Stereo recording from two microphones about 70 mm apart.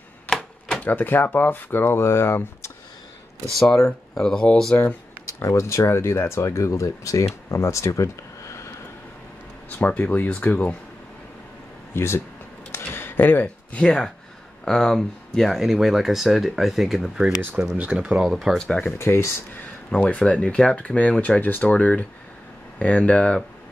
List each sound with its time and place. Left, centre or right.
0.3 s typewriter: centre
0.8 s speech: left
4.1 s speech: centre
5.4 s speech: left
9.8 s speech: left
11.9 s speech: left
12.7 s a sound: left
13.7 s speech: centre
17.6 s speech: centre
18.2 s speech: centre
18.9 s speech: left
19.9 s speech: centre